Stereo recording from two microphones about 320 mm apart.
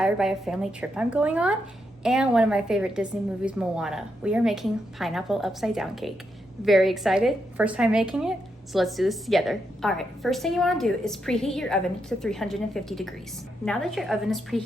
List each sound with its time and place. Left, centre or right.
0.0 s a woman's voice: centre